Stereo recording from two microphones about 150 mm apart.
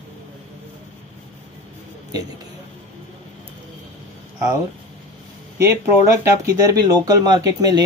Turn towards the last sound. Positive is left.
turn(degrees=-25)  # may be behind; listen again after turning